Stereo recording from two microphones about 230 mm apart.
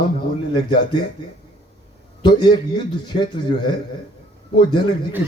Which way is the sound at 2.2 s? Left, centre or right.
Centre.